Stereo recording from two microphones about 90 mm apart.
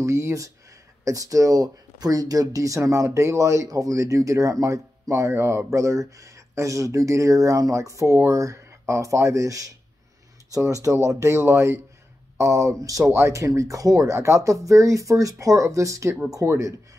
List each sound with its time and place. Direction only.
0.0 s speech: 35° right (ahead or behind)